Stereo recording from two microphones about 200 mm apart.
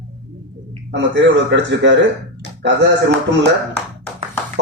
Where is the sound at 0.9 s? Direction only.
65° right (ahead or behind).